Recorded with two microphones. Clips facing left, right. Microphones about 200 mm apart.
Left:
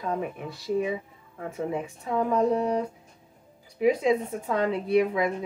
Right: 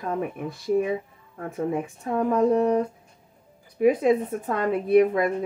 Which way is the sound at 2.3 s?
50° right (ahead or behind).